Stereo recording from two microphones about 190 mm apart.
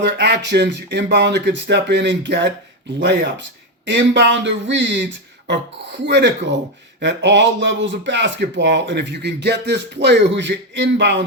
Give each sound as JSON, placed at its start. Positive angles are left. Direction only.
{"t": 0.0, "sound": "speech", "side_deg": -65}